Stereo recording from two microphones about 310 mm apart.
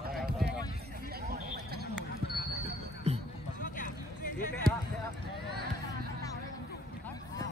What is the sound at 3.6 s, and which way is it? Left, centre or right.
Music, left.